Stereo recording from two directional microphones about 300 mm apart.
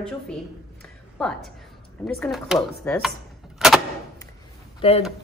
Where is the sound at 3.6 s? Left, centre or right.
Centre.